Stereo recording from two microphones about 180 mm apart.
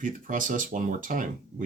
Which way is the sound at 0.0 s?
45° right (ahead or behind).